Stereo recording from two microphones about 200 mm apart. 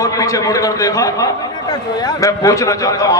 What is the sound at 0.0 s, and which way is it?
A man's voice, 15° left (ahead or behind).